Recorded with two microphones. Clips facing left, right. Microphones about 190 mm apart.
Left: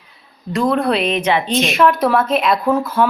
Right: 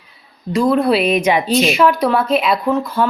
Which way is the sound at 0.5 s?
Centre (ahead or behind).